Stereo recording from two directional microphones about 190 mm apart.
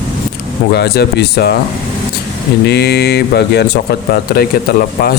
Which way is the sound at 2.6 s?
60° left (ahead or behind).